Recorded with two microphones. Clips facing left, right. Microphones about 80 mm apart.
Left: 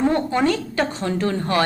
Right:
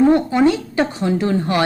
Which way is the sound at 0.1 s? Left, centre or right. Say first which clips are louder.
Right 5 dB; centre.